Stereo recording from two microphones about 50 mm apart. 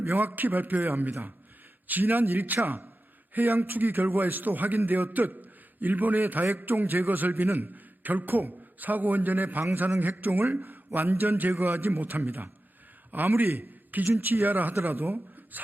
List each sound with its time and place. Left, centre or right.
0.0 s a man's voice: right